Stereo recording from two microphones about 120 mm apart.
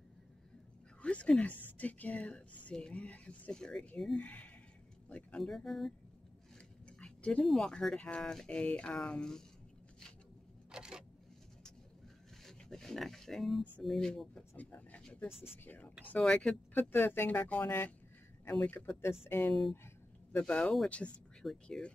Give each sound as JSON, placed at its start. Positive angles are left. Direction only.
{"t": 1.0, "sound": "a woman's voice", "side_deg": 10}
{"t": 7.0, "sound": "a woman's voice", "side_deg": 10}
{"t": 10.7, "sound": "camera", "side_deg": -5}
{"t": 12.4, "sound": "a sound", "side_deg": 5}
{"t": 13.8, "sound": "speech", "side_deg": 5}
{"t": 14.5, "sound": "a woman's voice", "side_deg": 15}
{"t": 20.3, "sound": "a woman's voice", "side_deg": 10}